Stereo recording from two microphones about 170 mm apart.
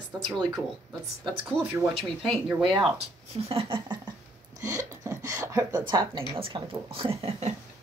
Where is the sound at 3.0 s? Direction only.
35° right (ahead or behind).